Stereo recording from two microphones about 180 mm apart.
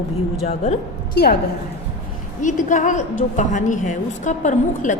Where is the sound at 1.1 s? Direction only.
60° left (ahead or behind).